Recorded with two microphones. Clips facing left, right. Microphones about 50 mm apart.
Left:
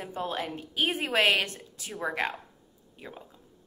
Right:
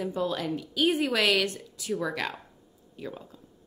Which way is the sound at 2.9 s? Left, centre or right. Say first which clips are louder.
Right 5 dB; left.